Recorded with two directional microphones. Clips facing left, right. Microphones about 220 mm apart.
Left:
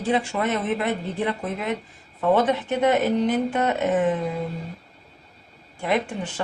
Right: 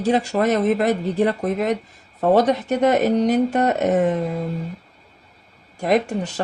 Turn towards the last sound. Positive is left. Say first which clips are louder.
# right 5 dB
turn(degrees=-40)  # may be behind; listen again after turning